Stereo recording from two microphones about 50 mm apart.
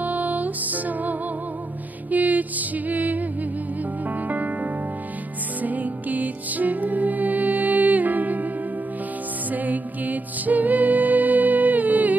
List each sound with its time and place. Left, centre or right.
0.0 s music: right
5.6 s music: right
9.5 s music: right